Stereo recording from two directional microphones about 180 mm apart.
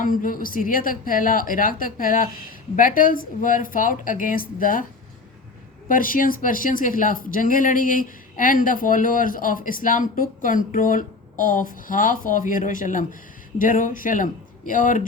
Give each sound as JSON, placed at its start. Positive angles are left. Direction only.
{"t": 0.0, "sound": "speech", "side_deg": 50}
{"t": 5.9, "sound": "speech", "side_deg": 50}